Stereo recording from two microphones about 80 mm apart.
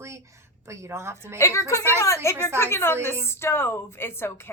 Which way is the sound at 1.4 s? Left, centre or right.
Left.